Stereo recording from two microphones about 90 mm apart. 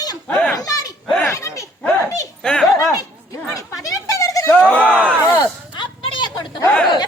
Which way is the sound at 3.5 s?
40° left (ahead or behind).